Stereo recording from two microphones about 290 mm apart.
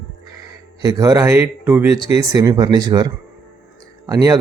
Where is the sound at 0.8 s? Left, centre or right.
Centre.